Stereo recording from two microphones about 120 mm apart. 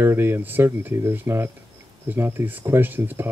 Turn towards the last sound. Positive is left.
turn(degrees=-15)  # may be behind; listen again after turning